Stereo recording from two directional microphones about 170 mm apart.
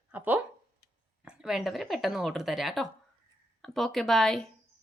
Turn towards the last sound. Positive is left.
turn(degrees=0)  # may be behind; listen again after turning